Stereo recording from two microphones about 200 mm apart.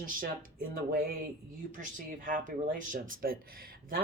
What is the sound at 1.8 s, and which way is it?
Speech, 40° right (ahead or behind).